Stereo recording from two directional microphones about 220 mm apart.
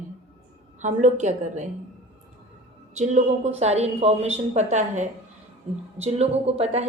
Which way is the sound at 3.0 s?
30° right (ahead or behind).